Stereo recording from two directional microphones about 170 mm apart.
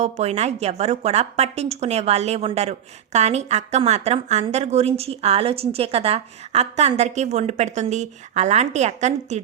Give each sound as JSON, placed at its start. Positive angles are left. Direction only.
{"t": 0.0, "sound": "a woman's voice", "side_deg": -40}